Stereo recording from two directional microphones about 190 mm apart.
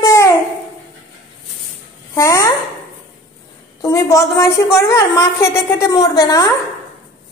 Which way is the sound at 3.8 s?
15° left (ahead or behind).